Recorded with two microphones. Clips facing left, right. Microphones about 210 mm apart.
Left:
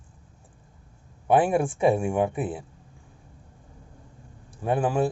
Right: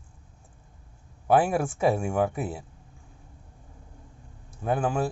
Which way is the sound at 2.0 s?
Centre (ahead or behind).